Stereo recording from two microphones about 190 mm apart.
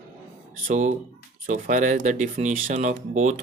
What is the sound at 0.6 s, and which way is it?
Speech, 40° right (ahead or behind).